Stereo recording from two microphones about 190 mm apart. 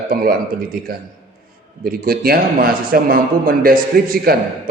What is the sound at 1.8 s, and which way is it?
A man's voice, 50° right (ahead or behind).